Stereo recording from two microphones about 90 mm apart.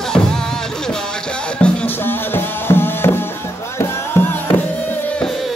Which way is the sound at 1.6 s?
20° left (ahead or behind).